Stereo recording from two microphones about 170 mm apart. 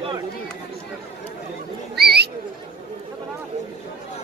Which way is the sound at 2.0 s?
75° right (ahead or behind).